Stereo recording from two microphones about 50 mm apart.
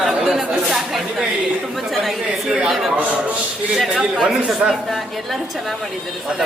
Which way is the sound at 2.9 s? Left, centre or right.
Right.